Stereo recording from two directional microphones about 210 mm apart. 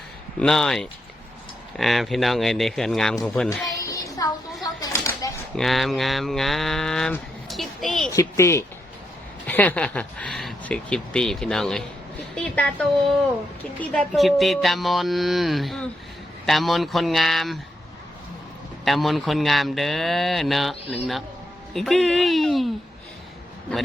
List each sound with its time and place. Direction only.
0.3 s mantra: 5° left (ahead or behind)
3.8 s child singing: 15° left (ahead or behind)
4.6 s a sound: 15° left (ahead or behind)
5.5 s mantra: centre (ahead or behind)
8.1 s speech: 15° left (ahead or behind)
9.5 s mantra: 10° left (ahead or behind)
18.9 s mantra: centre (ahead or behind)